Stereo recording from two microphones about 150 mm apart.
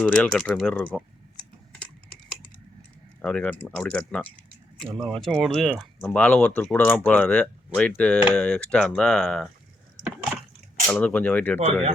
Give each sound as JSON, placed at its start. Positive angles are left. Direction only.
{"t": 0.0, "sound": "speech", "side_deg": 5}
{"t": 3.2, "sound": "speech", "side_deg": 10}
{"t": 10.8, "sound": "speech", "side_deg": 10}
{"t": 11.6, "sound": "speech", "side_deg": -45}